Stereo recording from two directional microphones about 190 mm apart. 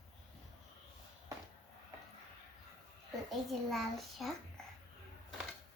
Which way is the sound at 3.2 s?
Centre (ahead or behind).